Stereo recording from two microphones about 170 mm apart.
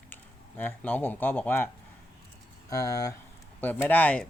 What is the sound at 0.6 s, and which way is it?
Speech, 10° left (ahead or behind).